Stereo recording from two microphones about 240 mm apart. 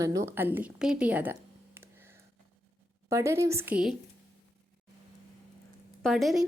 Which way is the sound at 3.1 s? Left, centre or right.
Centre.